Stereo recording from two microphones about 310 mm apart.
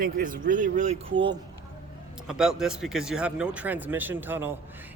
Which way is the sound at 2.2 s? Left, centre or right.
Centre.